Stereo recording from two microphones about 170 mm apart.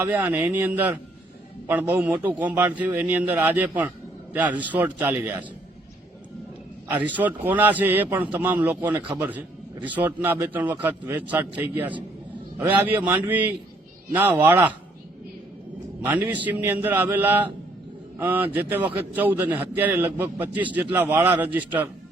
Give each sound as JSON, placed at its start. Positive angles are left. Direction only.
{"t": 0.0, "sound": "a man's voice", "side_deg": -10}
{"t": 7.0, "sound": "a man's voice", "side_deg": -10}
{"t": 16.0, "sound": "a man's voice", "side_deg": -10}